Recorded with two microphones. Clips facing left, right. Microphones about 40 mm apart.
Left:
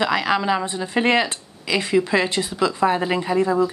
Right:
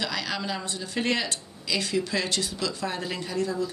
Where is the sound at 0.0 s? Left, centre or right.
Left.